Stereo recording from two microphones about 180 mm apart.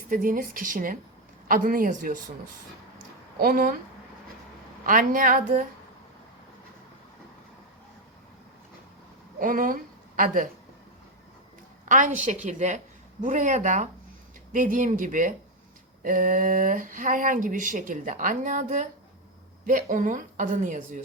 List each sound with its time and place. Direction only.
0.1 s speech: 50° right (ahead or behind)
3.3 s speech: 55° right (ahead or behind)
4.9 s speech: 50° right (ahead or behind)
9.4 s a woman's voice: 50° right (ahead or behind)
11.9 s speech: 45° right (ahead or behind)